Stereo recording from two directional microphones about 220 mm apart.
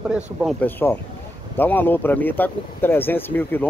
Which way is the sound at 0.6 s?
10° left (ahead or behind).